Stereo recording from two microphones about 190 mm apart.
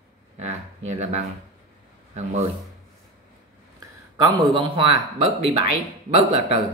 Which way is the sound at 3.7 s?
20° right (ahead or behind).